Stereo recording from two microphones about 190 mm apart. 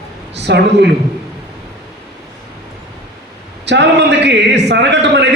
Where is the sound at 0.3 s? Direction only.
65° right (ahead or behind).